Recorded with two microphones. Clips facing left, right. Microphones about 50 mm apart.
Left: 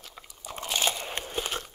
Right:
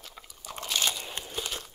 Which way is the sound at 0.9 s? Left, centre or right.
Left.